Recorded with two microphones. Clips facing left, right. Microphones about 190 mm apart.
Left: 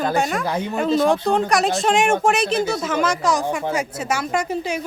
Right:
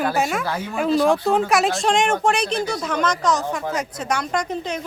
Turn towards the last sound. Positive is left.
turn(degrees=5)  # may be behind; listen again after turning